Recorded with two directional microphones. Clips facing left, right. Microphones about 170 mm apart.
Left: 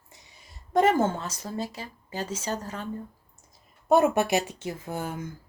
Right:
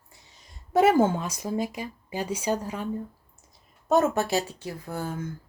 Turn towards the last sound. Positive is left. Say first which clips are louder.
# even
turn(degrees=20)  # may be behind; listen again after turning